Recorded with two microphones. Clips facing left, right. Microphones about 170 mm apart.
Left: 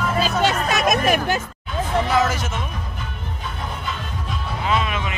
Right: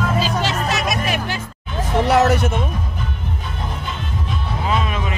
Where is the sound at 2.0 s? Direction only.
70° right (ahead or behind).